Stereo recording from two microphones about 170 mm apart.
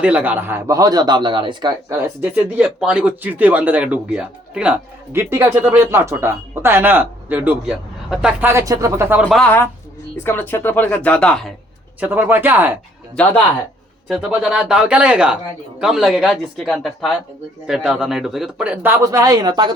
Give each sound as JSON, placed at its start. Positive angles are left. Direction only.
{"t": 0.0, "sound": "a man's voice", "side_deg": -5}
{"t": 1.9, "sound": "speech", "side_deg": -10}
{"t": 9.3, "sound": "speech", "side_deg": 10}
{"t": 11.9, "sound": "speech", "side_deg": -10}
{"t": 14.1, "sound": "speech", "side_deg": -5}